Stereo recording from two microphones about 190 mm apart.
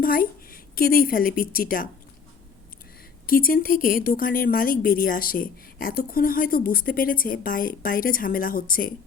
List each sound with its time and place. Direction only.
0.0 s a woman's voice: 50° left (ahead or behind)
3.2 s a woman's voice: 50° left (ahead or behind)